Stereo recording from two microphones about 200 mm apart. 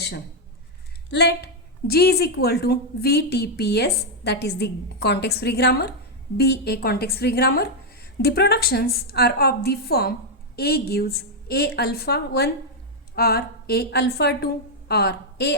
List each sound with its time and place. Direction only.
1.1 s a woman's voice: 55° left (ahead or behind)